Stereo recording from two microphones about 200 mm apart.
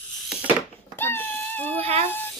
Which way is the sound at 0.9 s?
10° left (ahead or behind).